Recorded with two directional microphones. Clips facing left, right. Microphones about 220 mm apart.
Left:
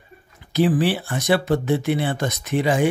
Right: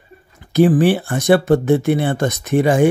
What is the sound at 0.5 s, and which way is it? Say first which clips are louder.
Speech: right 6 dB; 50° right (ahead or behind).